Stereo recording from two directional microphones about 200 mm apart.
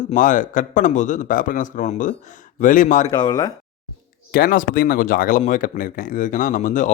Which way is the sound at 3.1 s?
20° left (ahead or behind).